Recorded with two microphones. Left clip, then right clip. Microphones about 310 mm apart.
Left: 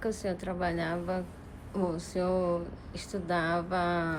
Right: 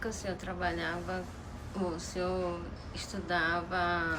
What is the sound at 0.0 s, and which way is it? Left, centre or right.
Speech, centre.